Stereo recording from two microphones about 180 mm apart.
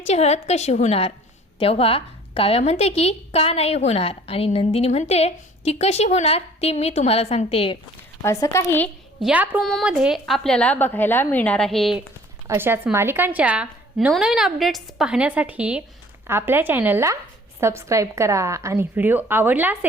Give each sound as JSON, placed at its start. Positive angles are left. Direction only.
{"t": 0.0, "sound": "a woman's voice", "side_deg": 35}
{"t": 8.2, "sound": "a woman's voice", "side_deg": 15}
{"t": 9.2, "sound": "a woman's voice", "side_deg": -10}
{"t": 12.5, "sound": "a woman's voice", "side_deg": -10}